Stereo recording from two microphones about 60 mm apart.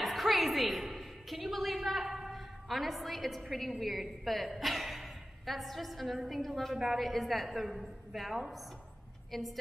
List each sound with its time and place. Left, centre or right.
0.0 s a woman's voice: centre